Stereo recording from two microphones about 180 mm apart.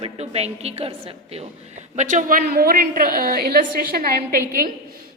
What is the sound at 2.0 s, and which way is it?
A woman's voice, 45° right (ahead or behind).